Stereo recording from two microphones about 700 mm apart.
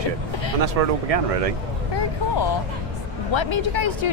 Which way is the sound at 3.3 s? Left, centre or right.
Left.